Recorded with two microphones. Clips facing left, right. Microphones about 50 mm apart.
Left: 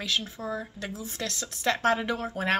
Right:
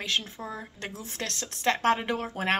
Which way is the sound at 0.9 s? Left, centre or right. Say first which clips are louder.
Left 1 dB; right.